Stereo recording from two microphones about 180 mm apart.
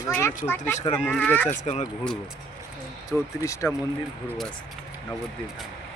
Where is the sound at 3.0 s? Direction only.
15° left (ahead or behind).